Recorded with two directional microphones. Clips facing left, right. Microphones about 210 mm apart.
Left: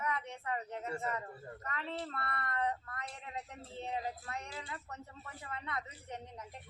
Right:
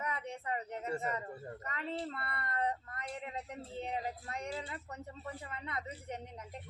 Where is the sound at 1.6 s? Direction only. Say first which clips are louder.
Right 1 dB; 30° right (ahead or behind).